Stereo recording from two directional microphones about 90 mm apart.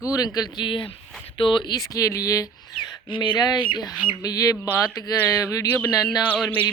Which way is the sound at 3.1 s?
60° left (ahead or behind).